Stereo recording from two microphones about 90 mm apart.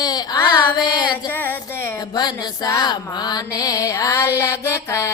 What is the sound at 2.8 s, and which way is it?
Mantra, 50° left (ahead or behind).